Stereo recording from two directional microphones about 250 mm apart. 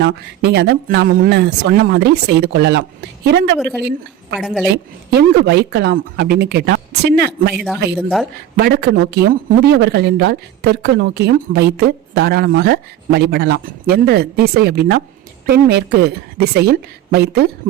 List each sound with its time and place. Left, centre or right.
0.0 s speech: right
3.6 s speech: centre
4.6 s speech: right
7.9 s speech: centre
8.5 s speech: right